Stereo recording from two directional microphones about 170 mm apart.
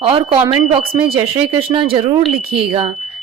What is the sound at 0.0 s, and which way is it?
Speech, 30° right (ahead or behind).